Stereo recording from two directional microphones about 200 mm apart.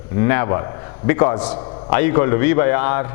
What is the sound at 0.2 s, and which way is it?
A man's voice, 15° left (ahead or behind).